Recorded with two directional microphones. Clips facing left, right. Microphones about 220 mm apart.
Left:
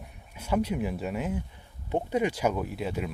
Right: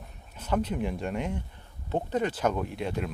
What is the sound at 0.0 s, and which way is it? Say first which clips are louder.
Speech: left 1 dB; 10° left (ahead or behind).